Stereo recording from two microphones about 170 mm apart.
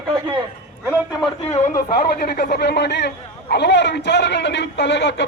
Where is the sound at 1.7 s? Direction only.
60° left (ahead or behind).